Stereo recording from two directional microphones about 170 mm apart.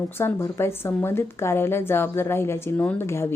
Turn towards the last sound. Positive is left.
turn(degrees=15)  # may be behind; listen again after turning